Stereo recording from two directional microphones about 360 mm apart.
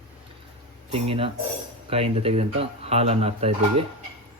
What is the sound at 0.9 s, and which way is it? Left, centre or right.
Speech, centre.